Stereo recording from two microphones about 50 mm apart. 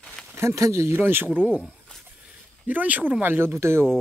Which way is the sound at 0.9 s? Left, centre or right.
Right.